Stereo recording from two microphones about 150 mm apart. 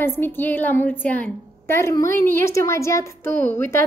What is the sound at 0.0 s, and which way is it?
A woman's voice, 15° left (ahead or behind).